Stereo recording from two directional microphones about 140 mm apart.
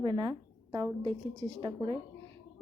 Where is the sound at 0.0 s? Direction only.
35° right (ahead or behind).